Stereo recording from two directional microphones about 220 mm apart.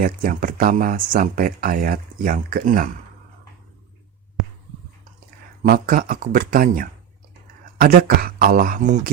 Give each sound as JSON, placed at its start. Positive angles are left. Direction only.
{"t": 0.0, "sound": "speech", "side_deg": -40}
{"t": 5.6, "sound": "speech", "side_deg": -40}